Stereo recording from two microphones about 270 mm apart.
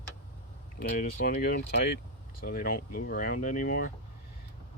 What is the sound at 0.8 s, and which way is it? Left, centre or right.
Speech, left.